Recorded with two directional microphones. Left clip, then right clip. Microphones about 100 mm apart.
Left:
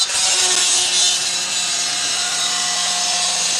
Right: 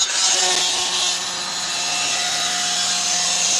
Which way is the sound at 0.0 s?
25° left (ahead or behind).